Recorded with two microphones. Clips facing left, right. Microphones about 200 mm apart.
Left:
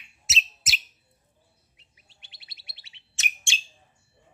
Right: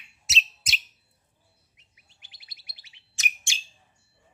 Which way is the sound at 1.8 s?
30° left (ahead or behind).